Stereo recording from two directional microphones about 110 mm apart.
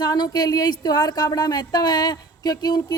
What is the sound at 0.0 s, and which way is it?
Speech, 35° left (ahead or behind).